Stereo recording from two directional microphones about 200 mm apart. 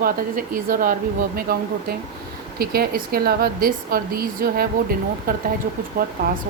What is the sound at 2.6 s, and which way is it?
A woman's voice, 50° right (ahead or behind).